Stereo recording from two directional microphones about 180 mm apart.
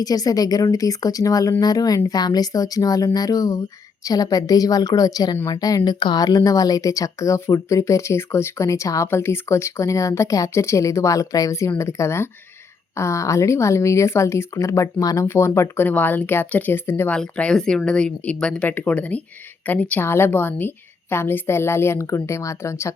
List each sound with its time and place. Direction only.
0.0 s a woman's voice: 20° left (ahead or behind)